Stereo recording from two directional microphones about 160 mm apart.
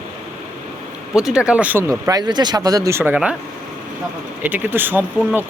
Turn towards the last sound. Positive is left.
turn(degrees=-10)  # may be behind; listen again after turning